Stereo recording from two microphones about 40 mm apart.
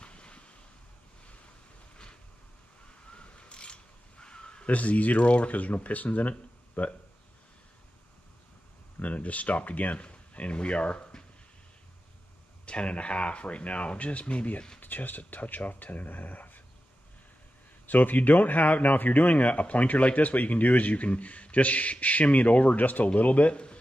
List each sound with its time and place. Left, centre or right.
0.0 s a sound: left
3.1 s a sound: left
4.6 s speech: left
9.0 s speech: left
12.6 s speech: left
14.8 s speech: left
17.8 s speech: left